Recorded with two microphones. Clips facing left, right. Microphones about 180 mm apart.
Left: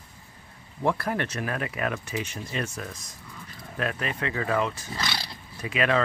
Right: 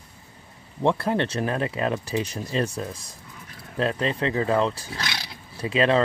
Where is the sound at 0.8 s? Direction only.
25° right (ahead or behind).